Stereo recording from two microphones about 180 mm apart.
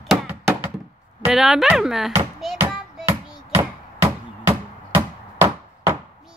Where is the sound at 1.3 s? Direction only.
Centre (ahead or behind).